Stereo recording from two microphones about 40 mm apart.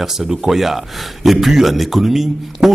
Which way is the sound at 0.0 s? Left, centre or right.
Centre.